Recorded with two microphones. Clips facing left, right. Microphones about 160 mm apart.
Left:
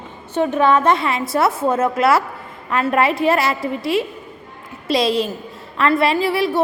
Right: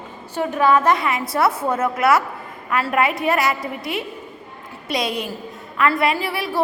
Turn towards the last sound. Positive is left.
turn(degrees=25)  # may be behind; listen again after turning